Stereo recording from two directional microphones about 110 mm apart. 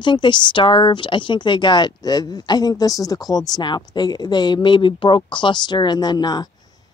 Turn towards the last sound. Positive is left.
turn(degrees=40)  # may be behind; listen again after turning